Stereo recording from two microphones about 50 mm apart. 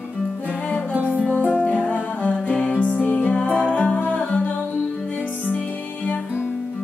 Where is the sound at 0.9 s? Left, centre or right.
Right.